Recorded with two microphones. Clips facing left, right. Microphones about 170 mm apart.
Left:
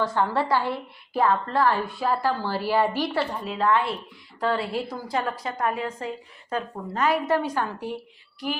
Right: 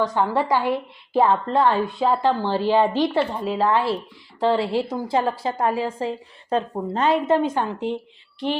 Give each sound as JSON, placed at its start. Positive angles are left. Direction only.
{"t": 0.0, "sound": "a woman's voice", "side_deg": -15}